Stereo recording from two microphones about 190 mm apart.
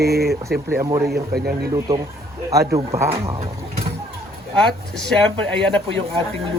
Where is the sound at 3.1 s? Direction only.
30° right (ahead or behind).